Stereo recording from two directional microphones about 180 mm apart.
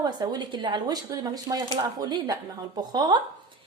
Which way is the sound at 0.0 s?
25° right (ahead or behind).